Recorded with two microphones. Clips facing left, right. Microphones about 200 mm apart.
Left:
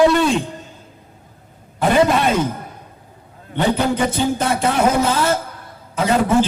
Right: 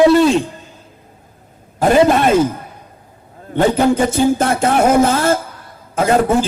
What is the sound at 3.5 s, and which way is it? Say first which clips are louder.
A man's voice: right 5 dB; 45° right (ahead or behind).